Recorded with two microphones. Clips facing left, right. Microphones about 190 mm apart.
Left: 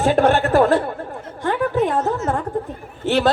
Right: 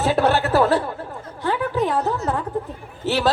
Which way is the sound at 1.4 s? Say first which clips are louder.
Left 3 dB; 50° left (ahead or behind).